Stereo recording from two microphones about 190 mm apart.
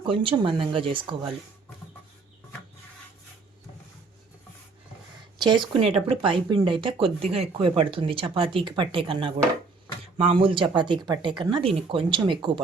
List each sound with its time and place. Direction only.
0.0 s speech: 25° right (ahead or behind)
5.4 s speech: 25° right (ahead or behind)